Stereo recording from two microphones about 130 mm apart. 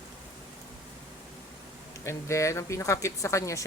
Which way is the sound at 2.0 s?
20° left (ahead or behind).